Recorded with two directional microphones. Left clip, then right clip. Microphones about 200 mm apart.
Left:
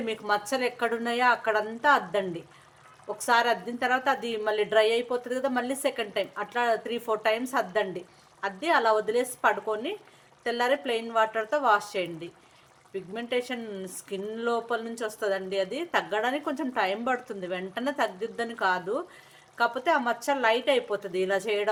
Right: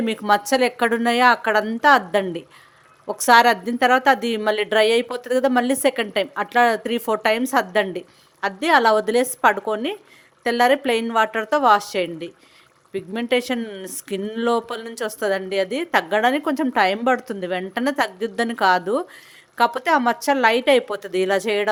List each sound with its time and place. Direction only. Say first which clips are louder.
0.0 s a woman's voice: right 9 dB; 40° right (ahead or behind)